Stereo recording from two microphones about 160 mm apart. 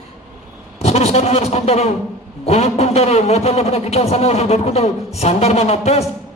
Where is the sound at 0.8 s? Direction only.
40° left (ahead or behind).